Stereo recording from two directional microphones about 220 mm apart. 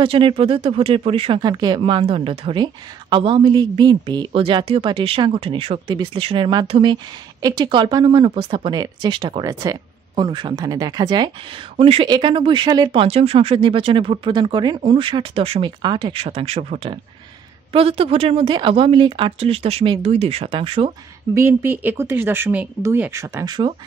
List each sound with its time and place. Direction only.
0.0 s speech: 25° right (ahead or behind)
21.5 s speech: 10° right (ahead or behind)